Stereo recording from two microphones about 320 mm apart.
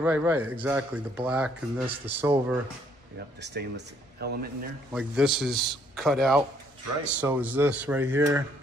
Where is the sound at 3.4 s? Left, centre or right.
Right.